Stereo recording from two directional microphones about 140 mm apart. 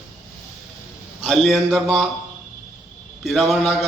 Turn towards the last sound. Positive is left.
turn(degrees=0)  # may be behind; listen again after turning